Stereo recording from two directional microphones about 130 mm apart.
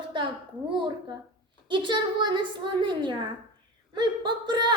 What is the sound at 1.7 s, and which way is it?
A child's voice, 35° right (ahead or behind).